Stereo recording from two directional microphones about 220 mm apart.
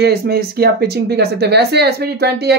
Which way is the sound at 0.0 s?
45° right (ahead or behind).